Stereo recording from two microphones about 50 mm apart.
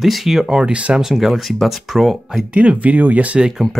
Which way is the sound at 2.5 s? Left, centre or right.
Right.